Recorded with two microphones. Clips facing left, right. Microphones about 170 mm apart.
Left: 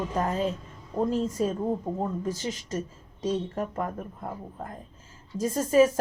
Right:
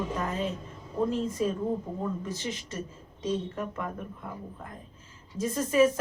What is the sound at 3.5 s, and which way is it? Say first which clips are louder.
Speech: left 4 dB; 40° left (ahead or behind).